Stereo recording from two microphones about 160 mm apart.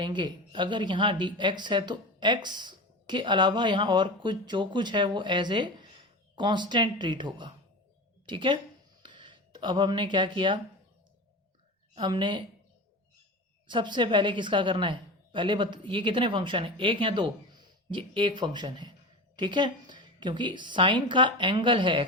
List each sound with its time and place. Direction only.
0.0 s a woman's voice: 30° right (ahead or behind)
11.9 s a woman's voice: 30° right (ahead or behind)
13.7 s a woman's voice: 30° right (ahead or behind)